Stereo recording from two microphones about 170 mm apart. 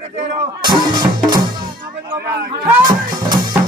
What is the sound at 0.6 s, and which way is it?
Music, 25° right (ahead or behind).